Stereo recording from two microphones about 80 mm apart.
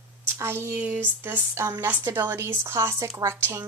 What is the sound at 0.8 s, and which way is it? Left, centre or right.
A child's voice, centre.